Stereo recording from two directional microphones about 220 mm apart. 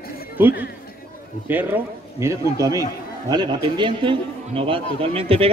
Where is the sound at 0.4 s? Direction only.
10° right (ahead or behind).